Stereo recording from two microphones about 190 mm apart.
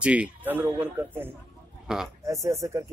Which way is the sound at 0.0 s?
5° right (ahead or behind).